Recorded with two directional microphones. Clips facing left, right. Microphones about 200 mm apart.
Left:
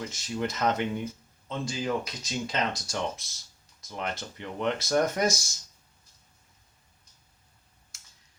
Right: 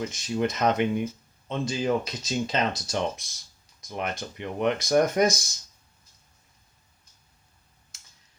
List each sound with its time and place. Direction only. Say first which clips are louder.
0.0 s speech: right 5 dB; 20° right (ahead or behind)